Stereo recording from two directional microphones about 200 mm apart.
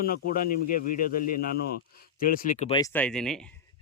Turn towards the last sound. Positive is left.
turn(degrees=5)  # may be behind; listen again after turning